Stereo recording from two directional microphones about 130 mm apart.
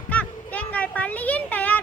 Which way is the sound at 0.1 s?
10° left (ahead or behind).